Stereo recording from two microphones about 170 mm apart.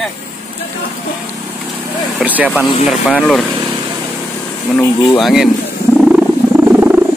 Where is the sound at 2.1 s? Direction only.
10° right (ahead or behind).